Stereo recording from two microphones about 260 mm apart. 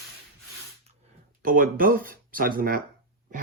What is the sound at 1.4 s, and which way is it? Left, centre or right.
Speech, right.